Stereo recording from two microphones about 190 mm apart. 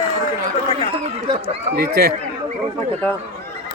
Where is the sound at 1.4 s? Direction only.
55° right (ahead or behind).